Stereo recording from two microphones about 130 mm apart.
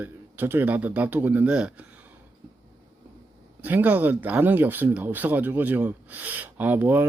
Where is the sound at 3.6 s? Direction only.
10° right (ahead or behind).